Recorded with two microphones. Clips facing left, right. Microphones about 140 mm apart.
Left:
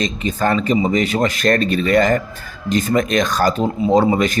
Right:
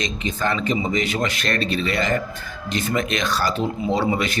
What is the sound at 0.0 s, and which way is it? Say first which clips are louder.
A man's voice: left 5 dB; 40° left (ahead or behind).